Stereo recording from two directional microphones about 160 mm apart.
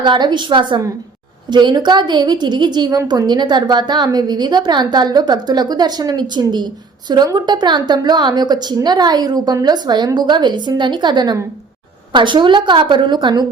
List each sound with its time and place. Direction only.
0.0 s a woman's voice: 25° right (ahead or behind)